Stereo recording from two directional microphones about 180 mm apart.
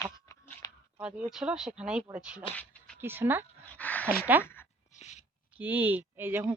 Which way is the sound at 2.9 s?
10° right (ahead or behind).